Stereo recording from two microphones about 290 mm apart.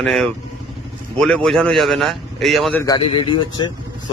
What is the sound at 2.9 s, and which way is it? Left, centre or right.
Speech, centre.